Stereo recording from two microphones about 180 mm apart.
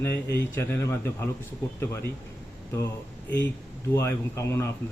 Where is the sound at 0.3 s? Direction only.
15° left (ahead or behind).